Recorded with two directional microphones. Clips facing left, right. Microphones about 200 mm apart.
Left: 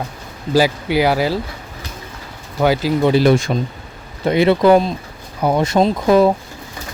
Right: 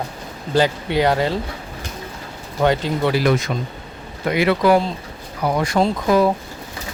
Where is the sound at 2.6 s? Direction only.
5° left (ahead or behind).